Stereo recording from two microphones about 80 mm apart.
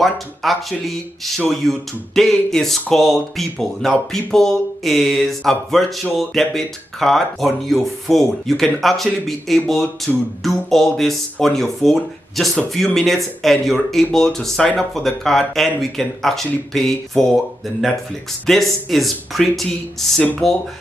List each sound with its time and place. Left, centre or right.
0.0 s speech: centre
18.5 s speech: centre